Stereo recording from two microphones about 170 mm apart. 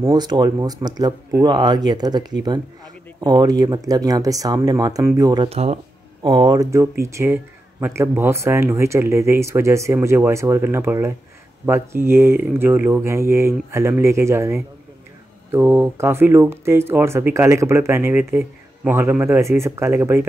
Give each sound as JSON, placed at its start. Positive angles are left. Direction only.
{"t": 0.0, "sound": "speech", "side_deg": -25}
{"t": 5.5, "sound": "speech", "side_deg": -40}
{"t": 6.2, "sound": "speech", "side_deg": -25}